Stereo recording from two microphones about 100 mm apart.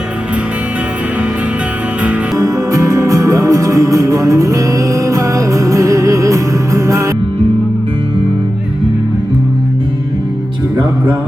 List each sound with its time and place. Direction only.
2.4 s music: 35° right (ahead or behind)